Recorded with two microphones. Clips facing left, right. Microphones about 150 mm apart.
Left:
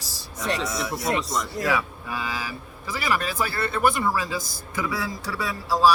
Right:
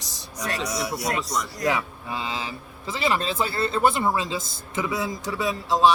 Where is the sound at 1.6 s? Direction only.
25° right (ahead or behind).